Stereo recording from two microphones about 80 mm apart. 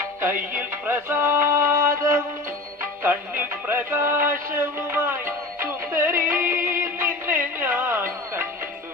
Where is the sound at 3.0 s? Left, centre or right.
Right.